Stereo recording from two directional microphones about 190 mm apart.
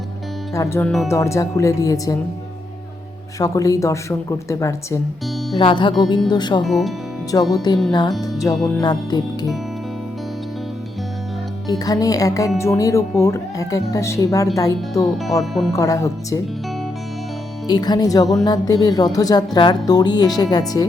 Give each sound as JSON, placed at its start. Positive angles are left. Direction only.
{"t": 0.5, "sound": "speech", "side_deg": 15}
{"t": 3.3, "sound": "speech", "side_deg": 20}
{"t": 6.6, "sound": "speech", "side_deg": 0}
{"t": 7.5, "sound": "speech", "side_deg": 20}
{"t": 11.7, "sound": "speech", "side_deg": 20}
{"t": 15.0, "sound": "speech", "side_deg": 0}
{"t": 15.7, "sound": "speech", "side_deg": 15}
{"t": 17.7, "sound": "speech", "side_deg": 20}